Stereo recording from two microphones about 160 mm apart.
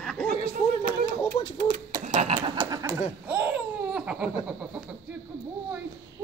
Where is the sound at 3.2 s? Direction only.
10° right (ahead or behind).